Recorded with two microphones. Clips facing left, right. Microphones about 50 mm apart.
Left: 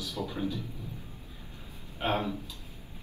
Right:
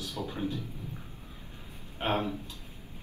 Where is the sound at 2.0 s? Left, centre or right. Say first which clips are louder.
Even; right.